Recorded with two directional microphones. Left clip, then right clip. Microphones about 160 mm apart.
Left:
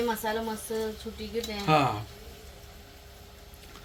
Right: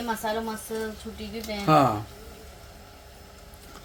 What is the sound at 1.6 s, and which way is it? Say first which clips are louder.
Speech: right 4 dB; 45° right (ahead or behind).